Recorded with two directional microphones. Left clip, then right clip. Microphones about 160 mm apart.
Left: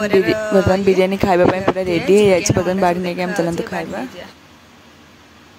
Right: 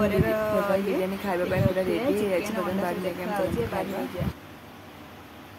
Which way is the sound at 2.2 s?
70° left (ahead or behind).